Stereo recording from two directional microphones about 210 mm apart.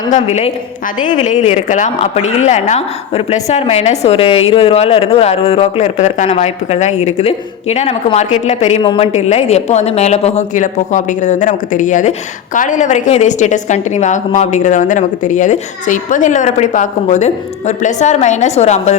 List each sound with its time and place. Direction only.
0.1 s a woman's voice: 30° left (ahead or behind)